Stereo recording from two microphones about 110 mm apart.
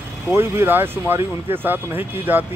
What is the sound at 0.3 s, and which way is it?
Speech, 20° right (ahead or behind).